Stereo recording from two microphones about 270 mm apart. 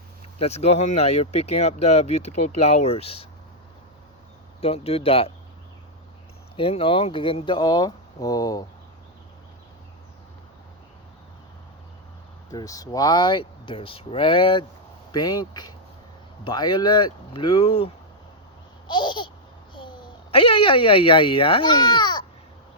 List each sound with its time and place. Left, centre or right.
0.3 s speech: left
4.6 s speech: left
6.6 s speech: left
12.5 s speech: centre
18.9 s babbling: centre
19.7 s speech: centre